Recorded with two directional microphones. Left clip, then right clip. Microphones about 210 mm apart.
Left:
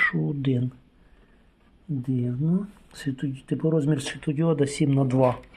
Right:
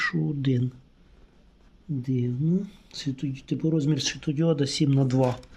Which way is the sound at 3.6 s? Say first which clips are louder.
Left 2 dB; 10° right (ahead or behind).